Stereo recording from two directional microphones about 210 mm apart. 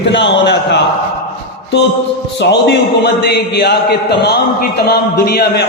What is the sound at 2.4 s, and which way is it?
A man's voice, 55° left (ahead or behind).